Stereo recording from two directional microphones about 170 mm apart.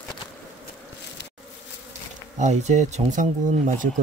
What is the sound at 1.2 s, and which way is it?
Bee, 90° left.